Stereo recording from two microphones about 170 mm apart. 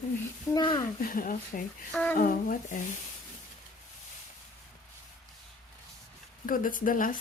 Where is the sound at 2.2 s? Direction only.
55° left (ahead or behind).